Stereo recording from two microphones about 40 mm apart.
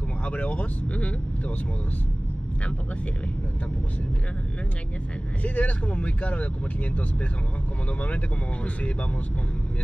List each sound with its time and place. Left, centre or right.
0.2 s speech: left
5.4 s speech: left